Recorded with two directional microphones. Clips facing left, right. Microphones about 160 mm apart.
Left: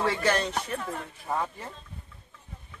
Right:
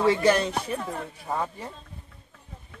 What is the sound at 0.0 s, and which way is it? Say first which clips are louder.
Speech: right 5 dB; 15° right (ahead or behind).